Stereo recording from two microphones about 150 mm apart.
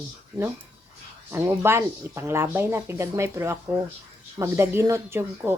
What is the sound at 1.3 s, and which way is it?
Speech, 15° right (ahead or behind).